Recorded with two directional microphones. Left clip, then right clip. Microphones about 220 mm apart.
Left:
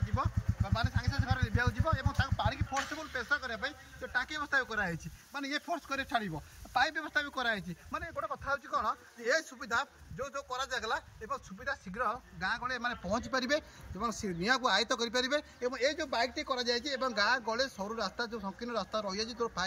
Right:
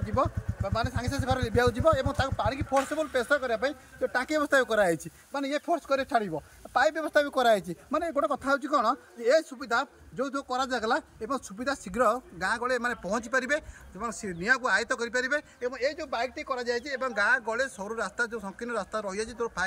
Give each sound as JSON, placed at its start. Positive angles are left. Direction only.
{"t": 0.1, "sound": "speech", "side_deg": -30}
{"t": 11.6, "sound": "speech", "side_deg": -40}